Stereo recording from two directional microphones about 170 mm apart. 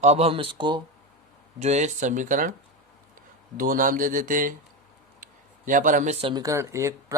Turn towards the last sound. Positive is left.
turn(degrees=-15)  # may be behind; listen again after turning